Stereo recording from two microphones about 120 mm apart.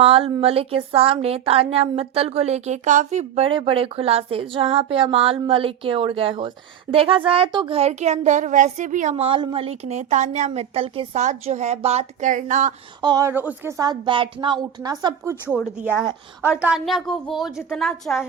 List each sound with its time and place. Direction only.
0.0 s speech: 50° right (ahead or behind); by 3.4 s 75° right (ahead or behind)
3.4 s speech: 50° right (ahead or behind)
7.8 s a woman's voice: 65° right (ahead or behind); by 9.2 s 90° right
9.2 s speech: 45° right (ahead or behind)
11.1 s a woman's voice: 75° right (ahead or behind); by 12.7 s 90° right
13.0 s a woman's voice: 35° right (ahead or behind)
13.2 s a woman's voice: 15° right (ahead or behind)
13.7 s a woman's voice: 30° right (ahead or behind)
15.5 s a woman's voice: centre (ahead or behind)
16.8 s a woman's voice: centre (ahead or behind)